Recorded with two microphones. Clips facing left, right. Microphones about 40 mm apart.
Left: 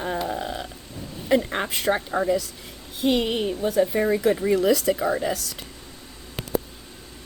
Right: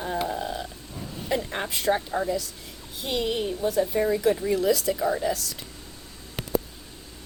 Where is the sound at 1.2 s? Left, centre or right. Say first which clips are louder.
Left 6 dB; left.